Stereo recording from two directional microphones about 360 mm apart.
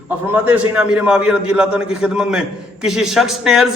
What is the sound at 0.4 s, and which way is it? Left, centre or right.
A man's voice, centre.